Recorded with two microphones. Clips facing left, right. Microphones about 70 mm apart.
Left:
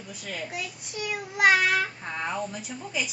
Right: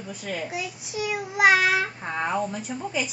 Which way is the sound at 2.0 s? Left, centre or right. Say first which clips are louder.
Right 4 dB; centre.